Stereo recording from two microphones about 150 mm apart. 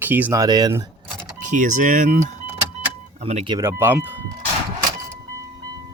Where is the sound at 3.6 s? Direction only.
15° right (ahead or behind).